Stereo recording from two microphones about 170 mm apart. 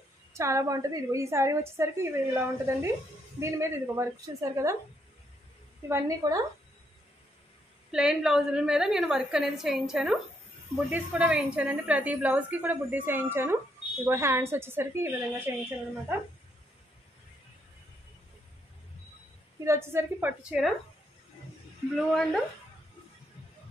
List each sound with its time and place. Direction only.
0.3 s a woman's voice: 15° right (ahead or behind)
5.9 s a woman's voice: 15° right (ahead or behind)
7.9 s a woman's voice: 5° right (ahead or behind)
19.6 s a woman's voice: 15° right (ahead or behind)
22.1 s a woman's voice: centre (ahead or behind)